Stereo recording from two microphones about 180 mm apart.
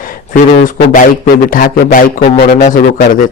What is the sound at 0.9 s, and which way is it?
Speech, 50° left (ahead or behind).